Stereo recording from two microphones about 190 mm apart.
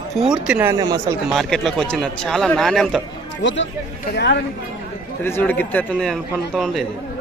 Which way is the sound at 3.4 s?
75° left (ahead or behind).